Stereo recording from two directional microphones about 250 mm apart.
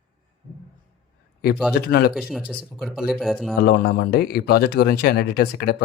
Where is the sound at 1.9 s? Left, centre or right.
Left.